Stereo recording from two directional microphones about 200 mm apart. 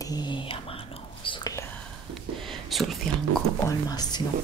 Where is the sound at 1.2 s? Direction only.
20° left (ahead or behind).